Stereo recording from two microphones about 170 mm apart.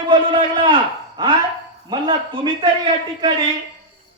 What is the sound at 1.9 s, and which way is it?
A man's voice, 30° right (ahead or behind).